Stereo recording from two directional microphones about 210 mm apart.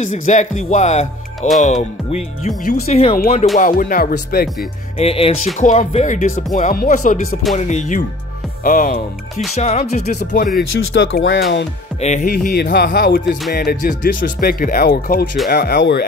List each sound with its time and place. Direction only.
0.0 s speech: 35° left (ahead or behind)
3.5 s speech: 40° left (ahead or behind)
4.9 s music: 25° left (ahead or behind)
5.6 s speech: 35° left (ahead or behind)
10.3 s speech: 45° left (ahead or behind)
10.8 s speech: 65° left (ahead or behind)
12.0 s speech: 35° left (ahead or behind)
12.3 s speech: 50° left (ahead or behind)